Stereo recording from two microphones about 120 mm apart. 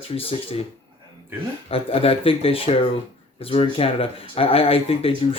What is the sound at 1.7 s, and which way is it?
Speech, 50° left (ahead or behind).